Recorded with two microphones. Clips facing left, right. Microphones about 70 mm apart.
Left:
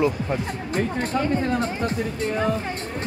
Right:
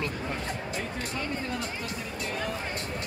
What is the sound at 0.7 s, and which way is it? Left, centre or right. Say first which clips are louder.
Speech: left 10 dB; left.